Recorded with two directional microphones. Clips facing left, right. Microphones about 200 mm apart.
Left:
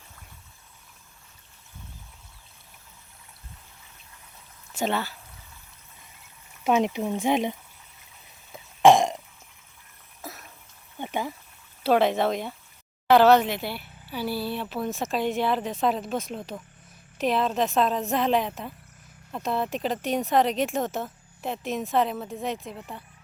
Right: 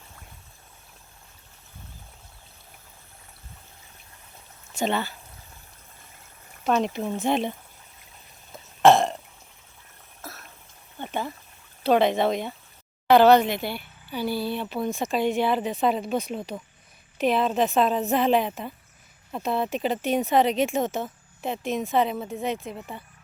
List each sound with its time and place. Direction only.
4.7 s speech: 5° left (ahead or behind)
6.7 s speech: 15° left (ahead or behind)
8.5 s burping: 15° left (ahead or behind)
10.2 s water: 15° left (ahead or behind)
10.9 s a sound: 15° left (ahead or behind)
11.8 s speech: 5° left (ahead or behind)